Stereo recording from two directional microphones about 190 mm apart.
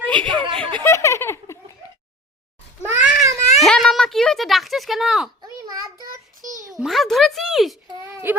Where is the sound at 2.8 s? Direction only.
10° right (ahead or behind).